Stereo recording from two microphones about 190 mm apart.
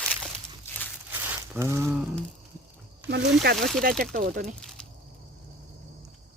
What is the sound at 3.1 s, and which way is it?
Speech, 65° right (ahead or behind).